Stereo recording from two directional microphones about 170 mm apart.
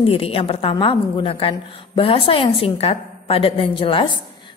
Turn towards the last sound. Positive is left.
turn(degrees=30)  # may be behind; listen again after turning